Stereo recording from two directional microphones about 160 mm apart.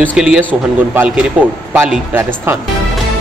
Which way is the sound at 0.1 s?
5° right (ahead or behind).